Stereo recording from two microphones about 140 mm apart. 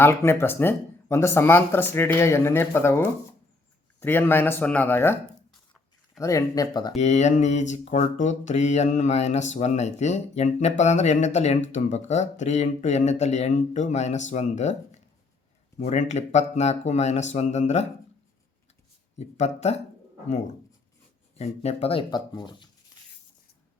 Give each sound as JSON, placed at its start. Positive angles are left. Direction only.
{"t": 0.0, "sound": "speech", "side_deg": 15}
{"t": 6.1, "sound": "speech", "side_deg": 25}
{"t": 6.9, "sound": "speech", "side_deg": 55}
{"t": 19.4, "sound": "speech", "side_deg": 50}
{"t": 21.3, "sound": "speech", "side_deg": 50}
{"t": 22.1, "sound": "speech", "side_deg": 30}